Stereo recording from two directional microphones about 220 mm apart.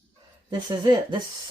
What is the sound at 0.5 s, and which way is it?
Speech, 20° right (ahead or behind).